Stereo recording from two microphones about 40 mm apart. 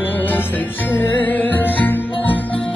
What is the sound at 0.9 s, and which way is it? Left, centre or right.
Music, left.